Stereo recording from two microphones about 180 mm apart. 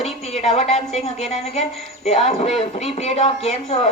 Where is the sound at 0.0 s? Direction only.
35° left (ahead or behind).